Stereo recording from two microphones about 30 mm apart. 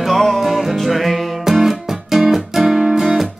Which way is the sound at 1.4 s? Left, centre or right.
Centre.